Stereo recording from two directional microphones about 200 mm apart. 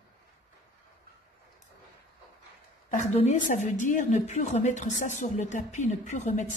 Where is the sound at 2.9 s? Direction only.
35° left (ahead or behind).